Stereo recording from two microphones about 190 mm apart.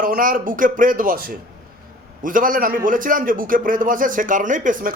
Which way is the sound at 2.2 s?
45° right (ahead or behind).